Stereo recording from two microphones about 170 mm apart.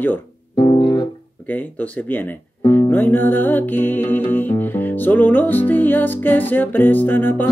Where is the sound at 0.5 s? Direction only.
25° left (ahead or behind).